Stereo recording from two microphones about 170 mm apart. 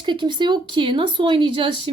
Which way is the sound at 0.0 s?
25° right (ahead or behind).